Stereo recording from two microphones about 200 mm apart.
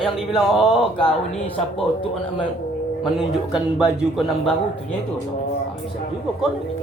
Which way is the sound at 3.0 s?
Centre (ahead or behind).